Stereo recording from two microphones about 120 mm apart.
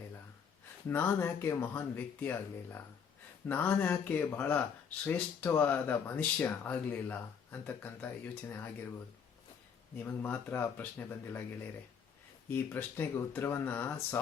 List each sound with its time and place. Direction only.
0.9 s speech: 15° left (ahead or behind)
9.9 s speech: 15° left (ahead or behind)
12.5 s speech: 15° left (ahead or behind)